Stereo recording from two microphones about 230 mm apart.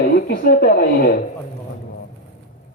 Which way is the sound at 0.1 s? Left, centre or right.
Left.